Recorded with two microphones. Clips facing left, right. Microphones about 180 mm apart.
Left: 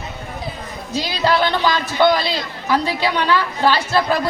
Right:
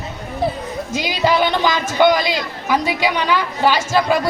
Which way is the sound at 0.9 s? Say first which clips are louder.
Right 1 dB; 15° right (ahead or behind).